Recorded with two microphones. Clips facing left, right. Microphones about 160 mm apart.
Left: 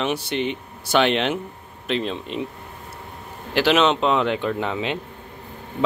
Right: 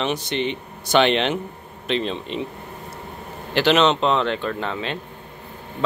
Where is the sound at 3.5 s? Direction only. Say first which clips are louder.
Right 1 dB; 5° left (ahead or behind).